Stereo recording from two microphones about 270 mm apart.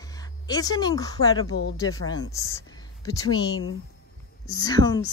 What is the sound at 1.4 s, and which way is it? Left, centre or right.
Speech, left.